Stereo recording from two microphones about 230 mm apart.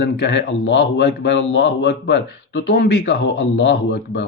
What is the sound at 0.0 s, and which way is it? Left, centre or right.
Speech, left.